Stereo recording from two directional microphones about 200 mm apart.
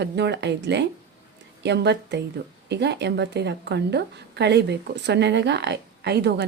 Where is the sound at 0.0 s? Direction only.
60° right (ahead or behind).